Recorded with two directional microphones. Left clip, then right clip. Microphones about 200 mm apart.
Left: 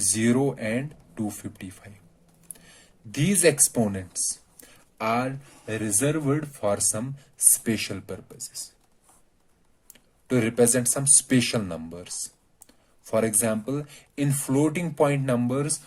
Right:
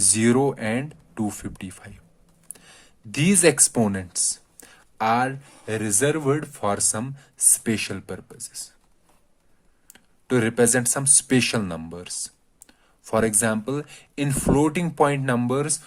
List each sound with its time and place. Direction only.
0.1 s speech: 35° right (ahead or behind)
3.1 s speech: 35° right (ahead or behind)
9.9 s speech: 30° right (ahead or behind)